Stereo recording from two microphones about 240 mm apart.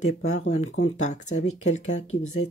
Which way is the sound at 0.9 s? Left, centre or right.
Left.